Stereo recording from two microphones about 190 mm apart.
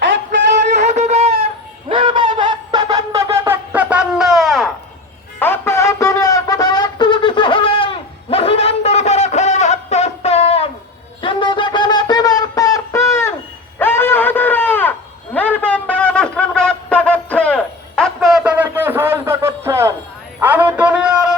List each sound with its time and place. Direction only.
0.7 s music: 35° right (ahead or behind)
1.9 s wind instrument: 25° right (ahead or behind); by 4.7 s centre (ahead or behind)
5.4 s wind instrument: 15° left (ahead or behind); by 10.7 s 30° left (ahead or behind)
11.2 s shofar: 25° left (ahead or behind)
13.7 s a sound: 10° left (ahead or behind); by 21.3 s 5° right (ahead or behind)